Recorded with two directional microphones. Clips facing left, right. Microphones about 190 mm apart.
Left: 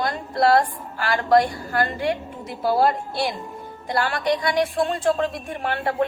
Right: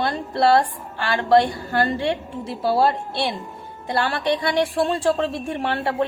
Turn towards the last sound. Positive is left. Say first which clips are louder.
# right 1 dB
turn(degrees=-30)  # may be behind; listen again after turning